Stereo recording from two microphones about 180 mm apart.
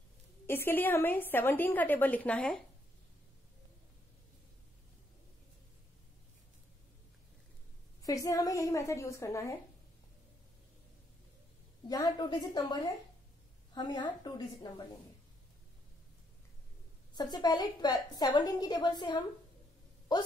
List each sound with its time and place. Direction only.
0.5 s a woman's voice: 10° left (ahead or behind)
8.0 s a woman's voice: 20° left (ahead or behind)
11.9 s a woman's voice: 20° left (ahead or behind)
17.1 s a woman's voice: 25° left (ahead or behind)